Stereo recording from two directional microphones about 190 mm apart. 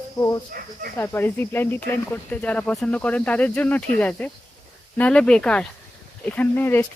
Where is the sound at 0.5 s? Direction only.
50° right (ahead or behind).